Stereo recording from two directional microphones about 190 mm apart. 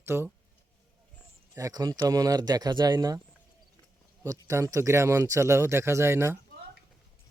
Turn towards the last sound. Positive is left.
turn(degrees=-15)  # may be behind; listen again after turning